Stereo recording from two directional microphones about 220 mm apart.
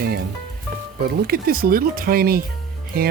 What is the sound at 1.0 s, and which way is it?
Speech, 45° right (ahead or behind).